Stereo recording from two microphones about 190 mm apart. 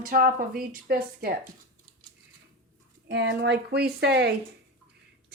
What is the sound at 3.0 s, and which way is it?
A woman's voice, 65° right (ahead or behind).